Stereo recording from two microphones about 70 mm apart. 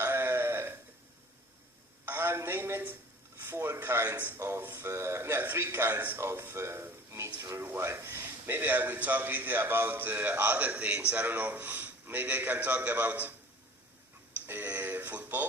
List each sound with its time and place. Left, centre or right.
0.0 s a sound: right
2.0 s a man's voice: right
14.4 s synthetic singing: right